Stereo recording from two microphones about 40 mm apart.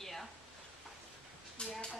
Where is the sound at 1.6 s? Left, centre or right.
Left.